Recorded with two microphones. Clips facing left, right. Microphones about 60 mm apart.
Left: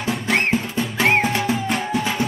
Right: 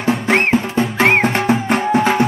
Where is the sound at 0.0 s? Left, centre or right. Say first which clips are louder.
Right 5 dB; right.